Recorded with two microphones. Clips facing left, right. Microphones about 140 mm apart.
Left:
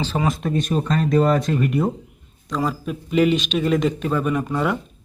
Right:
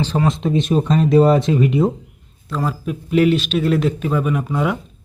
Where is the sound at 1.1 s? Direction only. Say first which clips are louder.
Right 5 dB; 25° right (ahead or behind).